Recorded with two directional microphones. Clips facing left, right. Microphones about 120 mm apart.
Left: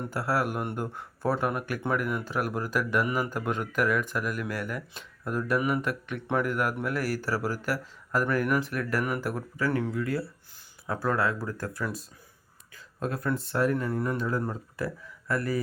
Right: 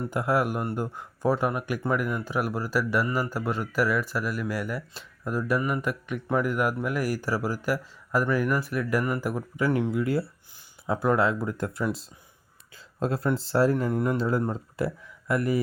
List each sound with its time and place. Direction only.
0.0 s speech: 15° right (ahead or behind)
0.5 s speech: 5° right (ahead or behind)
5.5 s speech: 5° left (ahead or behind)
5.8 s speech: 10° right (ahead or behind)